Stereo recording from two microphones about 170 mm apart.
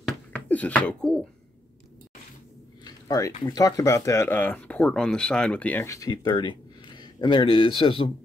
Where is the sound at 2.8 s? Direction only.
20° left (ahead or behind).